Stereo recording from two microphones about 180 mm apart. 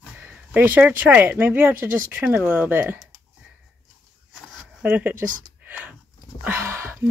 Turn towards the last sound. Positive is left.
turn(degrees=-10)  # may be behind; listen again after turning